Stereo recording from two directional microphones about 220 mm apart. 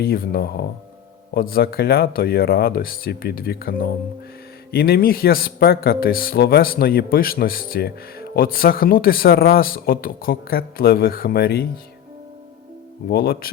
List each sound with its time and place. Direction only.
0.0 s a man's voice: 45° left (ahead or behind)
13.1 s a man's voice: 45° left (ahead or behind)